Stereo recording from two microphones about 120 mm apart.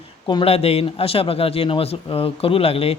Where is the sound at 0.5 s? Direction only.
55° left (ahead or behind).